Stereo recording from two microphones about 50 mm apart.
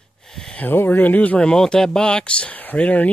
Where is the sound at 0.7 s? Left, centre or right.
Left.